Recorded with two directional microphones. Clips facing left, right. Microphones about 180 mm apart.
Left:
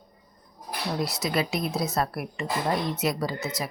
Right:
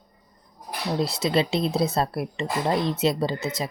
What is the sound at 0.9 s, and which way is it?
Speech, 30° right (ahead or behind).